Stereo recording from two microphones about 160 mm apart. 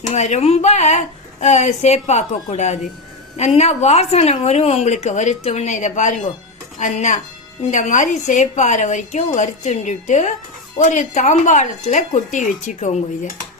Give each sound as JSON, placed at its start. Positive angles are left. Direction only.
{"t": 0.1, "sound": "a woman's voice", "side_deg": 45}